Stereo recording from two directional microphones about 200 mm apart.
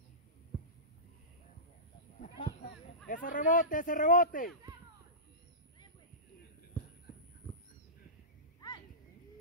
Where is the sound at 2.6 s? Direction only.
40° left (ahead or behind).